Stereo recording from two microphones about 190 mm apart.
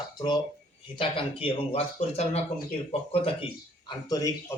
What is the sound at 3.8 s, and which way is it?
Speech, 20° left (ahead or behind).